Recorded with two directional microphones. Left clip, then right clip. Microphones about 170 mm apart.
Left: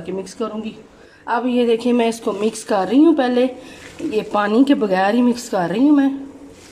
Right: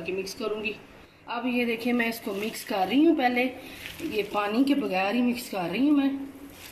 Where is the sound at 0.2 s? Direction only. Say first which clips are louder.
Left 5 dB; 55° left (ahead or behind).